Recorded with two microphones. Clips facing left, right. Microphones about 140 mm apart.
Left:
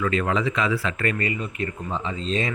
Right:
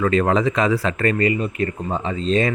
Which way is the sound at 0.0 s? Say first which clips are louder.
Right 6 dB; 40° right (ahead or behind).